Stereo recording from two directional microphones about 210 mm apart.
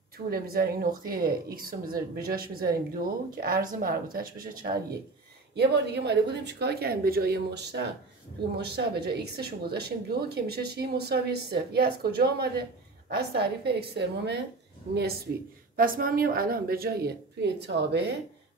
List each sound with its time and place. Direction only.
0.3 s speech: 45° right (ahead or behind)
15.7 s speech: 45° right (ahead or behind)